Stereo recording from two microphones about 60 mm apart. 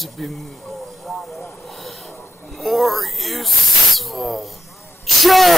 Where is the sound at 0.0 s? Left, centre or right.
Centre.